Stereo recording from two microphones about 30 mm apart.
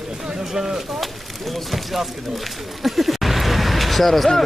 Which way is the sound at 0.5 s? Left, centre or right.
Right.